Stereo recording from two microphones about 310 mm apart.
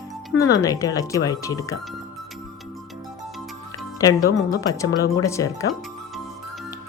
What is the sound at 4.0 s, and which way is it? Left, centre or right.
Speech, centre.